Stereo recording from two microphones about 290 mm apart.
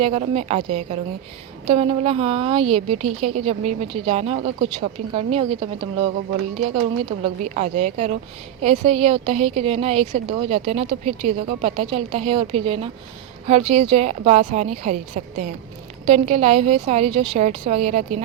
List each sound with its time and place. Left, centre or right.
0.0 s a woman's voice: right
7.4 s a woman's voice: right